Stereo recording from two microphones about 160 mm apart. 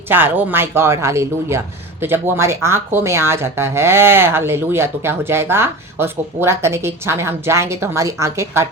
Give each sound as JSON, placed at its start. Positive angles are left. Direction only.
{"t": 0.1, "sound": "speech", "side_deg": -10}